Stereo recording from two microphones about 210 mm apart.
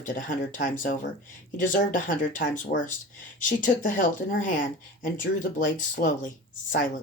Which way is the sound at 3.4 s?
40° left (ahead or behind).